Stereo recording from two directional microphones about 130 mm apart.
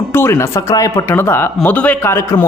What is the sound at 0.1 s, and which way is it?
A man's voice, 20° left (ahead or behind).